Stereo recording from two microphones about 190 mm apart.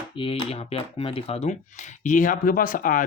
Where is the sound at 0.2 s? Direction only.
30° left (ahead or behind).